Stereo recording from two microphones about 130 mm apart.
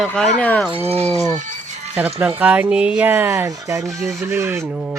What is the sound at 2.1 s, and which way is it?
Speech, 10° right (ahead or behind).